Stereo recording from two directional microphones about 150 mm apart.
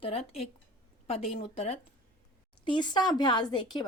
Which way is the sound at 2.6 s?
30° left (ahead or behind).